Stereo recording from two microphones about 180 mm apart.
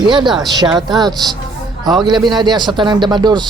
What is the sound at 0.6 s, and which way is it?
Speech, centre (ahead or behind).